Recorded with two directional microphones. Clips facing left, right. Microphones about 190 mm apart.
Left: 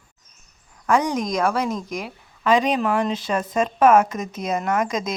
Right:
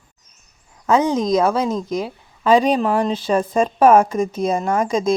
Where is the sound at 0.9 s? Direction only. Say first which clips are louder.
Right 4 dB; 25° right (ahead or behind).